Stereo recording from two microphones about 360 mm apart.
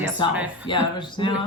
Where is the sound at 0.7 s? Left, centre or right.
Centre.